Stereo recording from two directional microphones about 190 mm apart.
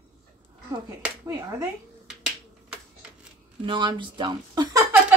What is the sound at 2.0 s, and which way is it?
Finger snapping, 5° right (ahead or behind).